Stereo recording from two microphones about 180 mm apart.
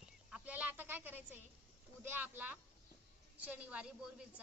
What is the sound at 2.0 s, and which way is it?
A woman's voice, 10° right (ahead or behind).